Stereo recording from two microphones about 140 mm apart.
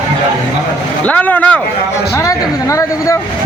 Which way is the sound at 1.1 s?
10° left (ahead or behind).